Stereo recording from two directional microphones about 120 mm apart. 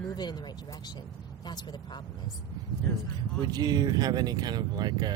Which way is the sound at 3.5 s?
35° right (ahead or behind).